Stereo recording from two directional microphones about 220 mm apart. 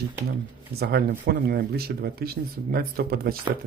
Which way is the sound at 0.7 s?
45° right (ahead or behind).